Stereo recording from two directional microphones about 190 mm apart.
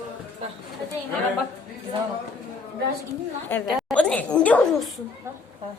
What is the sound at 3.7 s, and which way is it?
Speech, centre (ahead or behind).